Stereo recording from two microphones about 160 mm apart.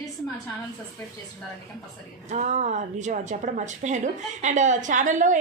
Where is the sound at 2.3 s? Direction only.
45° right (ahead or behind).